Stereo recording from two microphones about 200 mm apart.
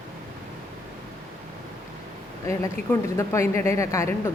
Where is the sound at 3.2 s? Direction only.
15° left (ahead or behind).